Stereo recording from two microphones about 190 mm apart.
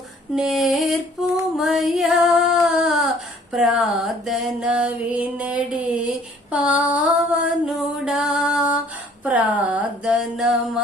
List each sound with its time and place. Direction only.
0.3 s female singing: centre (ahead or behind)
3.5 s mantra: centre (ahead or behind)
6.5 s a sound: 5° right (ahead or behind)